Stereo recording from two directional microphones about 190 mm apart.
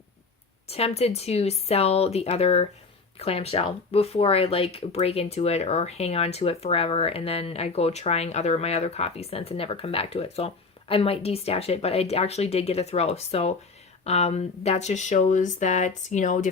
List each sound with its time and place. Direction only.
0.7 s speech: 30° left (ahead or behind)